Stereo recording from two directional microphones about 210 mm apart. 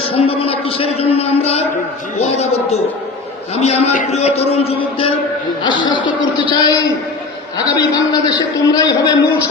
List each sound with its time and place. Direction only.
0.0 s a man's voice: 25° left (ahead or behind)